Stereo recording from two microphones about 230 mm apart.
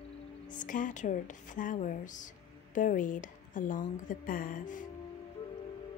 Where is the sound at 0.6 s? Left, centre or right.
Left.